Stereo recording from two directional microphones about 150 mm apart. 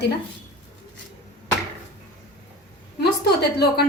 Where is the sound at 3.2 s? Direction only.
90° left.